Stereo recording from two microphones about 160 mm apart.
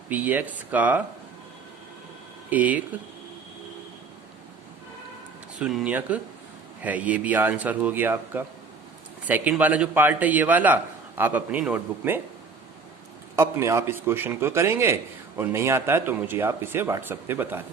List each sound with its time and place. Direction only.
0.1 s a man's voice: 10° right (ahead or behind)
2.5 s a man's voice: 10° right (ahead or behind)
5.5 s a man's voice: 5° right (ahead or behind)
13.3 s a man's voice: 15° right (ahead or behind)